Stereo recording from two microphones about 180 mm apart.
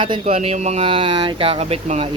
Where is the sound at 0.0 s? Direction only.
30° right (ahead or behind).